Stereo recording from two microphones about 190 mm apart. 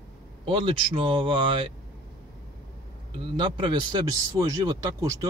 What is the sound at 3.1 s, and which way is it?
A man's voice, 25° right (ahead or behind).